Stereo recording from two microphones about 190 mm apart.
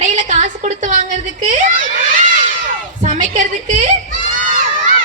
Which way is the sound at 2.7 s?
40° right (ahead or behind).